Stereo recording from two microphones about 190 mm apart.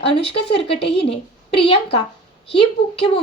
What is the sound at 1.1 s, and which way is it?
Speech, 30° left (ahead or behind).